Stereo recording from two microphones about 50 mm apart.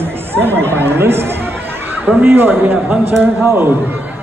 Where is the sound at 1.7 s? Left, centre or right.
Right.